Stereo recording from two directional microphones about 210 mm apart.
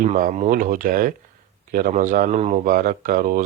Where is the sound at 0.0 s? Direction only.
35° right (ahead or behind).